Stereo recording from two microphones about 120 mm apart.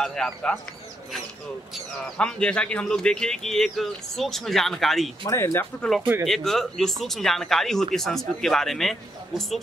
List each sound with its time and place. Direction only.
0.0 s speech: 5° left (ahead or behind)
2.1 s speech: 5° left (ahead or behind)
5.2 s speech: 20° left (ahead or behind)
5.8 s speech: centre (ahead or behind)